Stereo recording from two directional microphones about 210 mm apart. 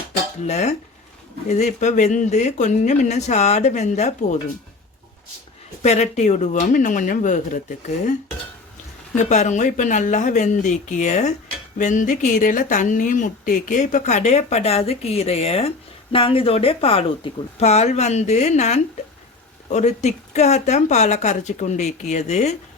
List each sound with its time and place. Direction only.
0.4 s speech: 30° left (ahead or behind)
5.8 s speech: 30° left (ahead or behind)
9.1 s speech: 35° left (ahead or behind)